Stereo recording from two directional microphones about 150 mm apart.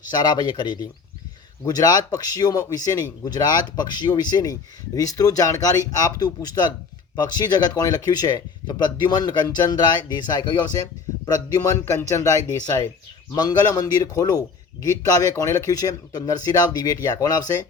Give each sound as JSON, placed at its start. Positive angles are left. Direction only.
{"t": 0.1, "sound": "a man's voice", "side_deg": 25}
{"t": 11.4, "sound": "a man's voice", "side_deg": 20}